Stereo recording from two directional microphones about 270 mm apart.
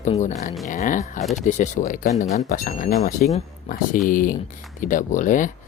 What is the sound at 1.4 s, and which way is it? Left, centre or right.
Speech, left.